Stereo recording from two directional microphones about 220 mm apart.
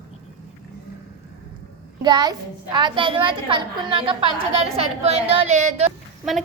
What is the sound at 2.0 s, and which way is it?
A woman's voice, 20° right (ahead or behind).